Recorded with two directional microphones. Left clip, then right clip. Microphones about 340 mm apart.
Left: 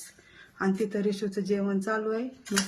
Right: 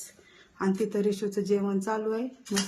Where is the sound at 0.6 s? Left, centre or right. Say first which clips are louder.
Right 1 dB; centre.